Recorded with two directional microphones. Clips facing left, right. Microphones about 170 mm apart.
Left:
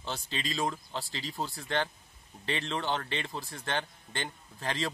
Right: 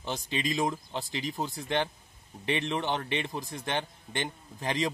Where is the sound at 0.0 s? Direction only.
15° right (ahead or behind).